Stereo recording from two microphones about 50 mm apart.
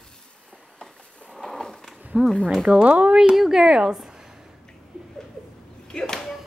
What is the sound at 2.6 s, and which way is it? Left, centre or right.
Speech, right.